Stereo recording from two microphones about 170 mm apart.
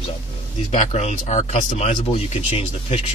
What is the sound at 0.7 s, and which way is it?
Speech, 45° left (ahead or behind).